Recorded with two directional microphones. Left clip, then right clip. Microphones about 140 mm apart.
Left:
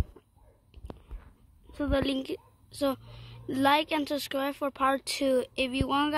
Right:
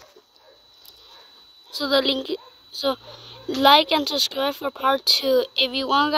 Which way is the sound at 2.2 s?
50° left (ahead or behind).